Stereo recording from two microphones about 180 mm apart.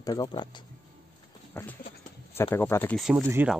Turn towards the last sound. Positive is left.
turn(degrees=-10)  # may be behind; listen again after turning